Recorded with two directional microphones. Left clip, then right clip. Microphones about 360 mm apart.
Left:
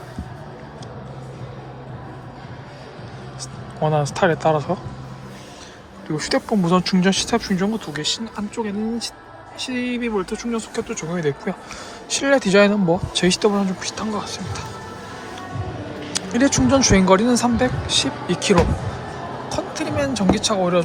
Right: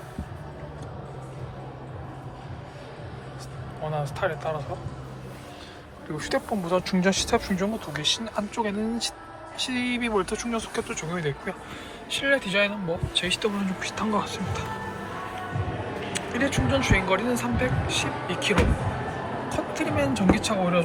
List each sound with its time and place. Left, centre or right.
3.8 s speech: centre
6.1 s speech: centre
12.6 s speech: left
13.2 s speech: centre
13.7 s speech: centre
16.1 s speech: centre
19.5 s a sound: centre
20.3 s speech: centre